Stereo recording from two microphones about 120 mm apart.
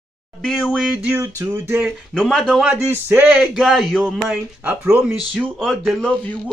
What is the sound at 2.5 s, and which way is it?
Speech, 10° right (ahead or behind).